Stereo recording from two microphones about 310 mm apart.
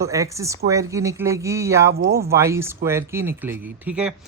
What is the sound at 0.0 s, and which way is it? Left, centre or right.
Speech, centre.